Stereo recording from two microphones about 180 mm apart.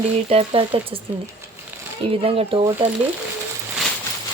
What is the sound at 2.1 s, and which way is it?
Speech, 30° right (ahead or behind).